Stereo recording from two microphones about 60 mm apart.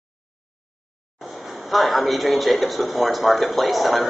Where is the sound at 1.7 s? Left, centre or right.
Centre.